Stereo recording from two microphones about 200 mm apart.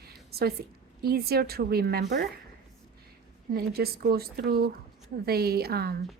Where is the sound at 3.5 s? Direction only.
50° right (ahead or behind).